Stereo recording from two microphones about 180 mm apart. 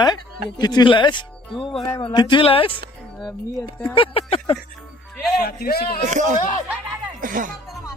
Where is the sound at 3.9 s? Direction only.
30° left (ahead or behind).